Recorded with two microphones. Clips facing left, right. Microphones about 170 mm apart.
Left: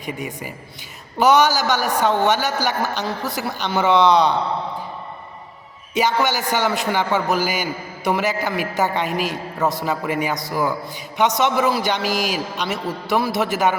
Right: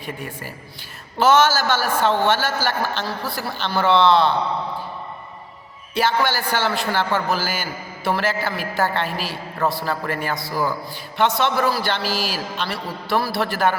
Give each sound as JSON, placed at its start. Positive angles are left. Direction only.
{"t": 1.2, "sound": "a man's voice", "side_deg": 15}
{"t": 6.0, "sound": "a man's voice", "side_deg": 15}